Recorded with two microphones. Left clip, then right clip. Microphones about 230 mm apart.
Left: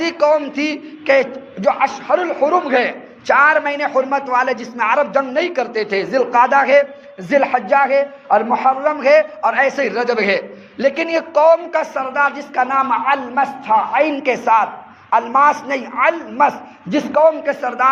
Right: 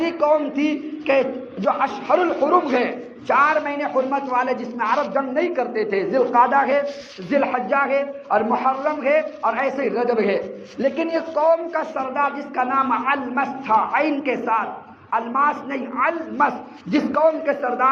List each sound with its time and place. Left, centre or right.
0.0 s a man's voice: left